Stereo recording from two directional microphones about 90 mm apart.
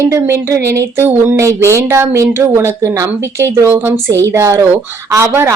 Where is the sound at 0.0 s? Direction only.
30° right (ahead or behind).